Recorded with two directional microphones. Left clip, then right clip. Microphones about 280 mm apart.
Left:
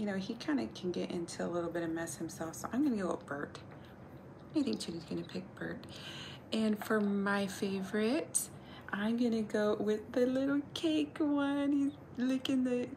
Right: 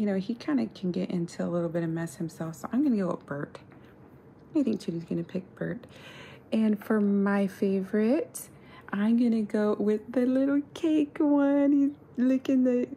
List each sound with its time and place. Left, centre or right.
0.0 s speech: right